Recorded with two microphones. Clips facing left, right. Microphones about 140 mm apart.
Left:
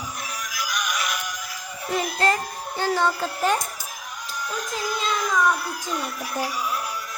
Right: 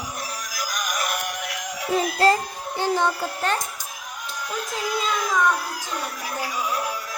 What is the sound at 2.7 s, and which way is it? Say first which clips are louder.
Speech: right 1 dB; 15° right (ahead or behind).